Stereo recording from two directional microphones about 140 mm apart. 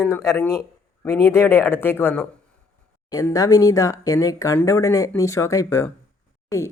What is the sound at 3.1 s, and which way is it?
Speech, 25° left (ahead or behind).